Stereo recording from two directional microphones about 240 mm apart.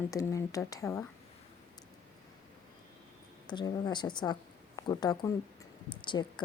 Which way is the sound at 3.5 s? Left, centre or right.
Centre.